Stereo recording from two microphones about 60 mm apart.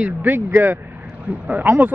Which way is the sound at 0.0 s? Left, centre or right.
Right.